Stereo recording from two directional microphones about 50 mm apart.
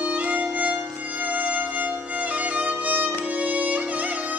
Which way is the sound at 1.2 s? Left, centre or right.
Right.